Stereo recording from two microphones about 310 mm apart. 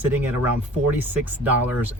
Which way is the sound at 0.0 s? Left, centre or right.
Centre.